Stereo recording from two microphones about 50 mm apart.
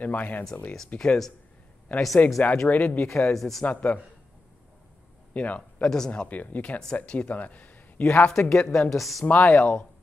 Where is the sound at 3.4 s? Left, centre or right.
Centre.